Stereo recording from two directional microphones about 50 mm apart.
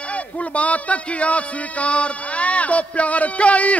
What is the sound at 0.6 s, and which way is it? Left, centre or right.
Speech, left.